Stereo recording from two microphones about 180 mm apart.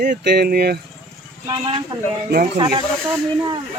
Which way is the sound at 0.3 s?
60° right (ahead or behind).